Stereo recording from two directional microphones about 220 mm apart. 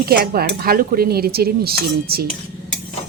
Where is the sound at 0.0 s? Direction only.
45° right (ahead or behind).